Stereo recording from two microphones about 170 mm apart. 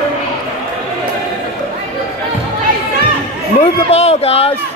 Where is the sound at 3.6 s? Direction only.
35° left (ahead or behind).